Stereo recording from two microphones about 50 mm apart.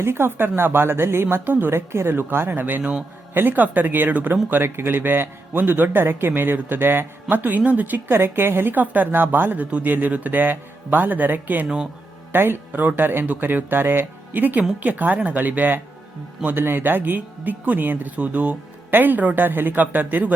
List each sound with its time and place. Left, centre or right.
0.0 s speech: right
8.1 s speech: right
8.7 s speech: right
16.6 s speech: right